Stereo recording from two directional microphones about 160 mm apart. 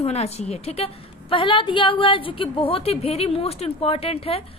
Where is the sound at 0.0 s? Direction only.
40° left (ahead or behind).